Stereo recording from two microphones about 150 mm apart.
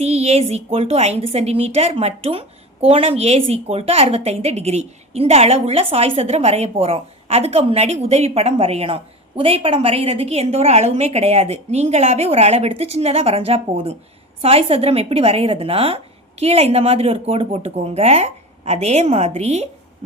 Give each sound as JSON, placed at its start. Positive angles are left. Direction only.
{"t": 0.0, "sound": "a woman's voice", "side_deg": -45}